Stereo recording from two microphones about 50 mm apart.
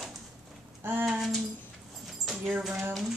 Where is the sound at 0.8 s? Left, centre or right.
Right.